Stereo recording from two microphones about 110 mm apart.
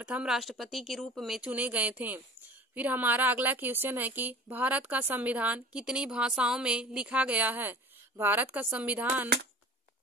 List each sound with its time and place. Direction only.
0.0 s speech: 10° right (ahead or behind)
1.5 s a woman's voice: 15° right (ahead or behind)